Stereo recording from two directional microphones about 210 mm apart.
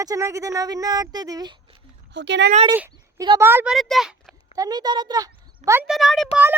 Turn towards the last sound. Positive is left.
turn(degrees=0)  # may be behind; listen again after turning